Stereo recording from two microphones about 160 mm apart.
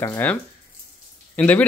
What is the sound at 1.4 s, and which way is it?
Speech, 10° left (ahead or behind).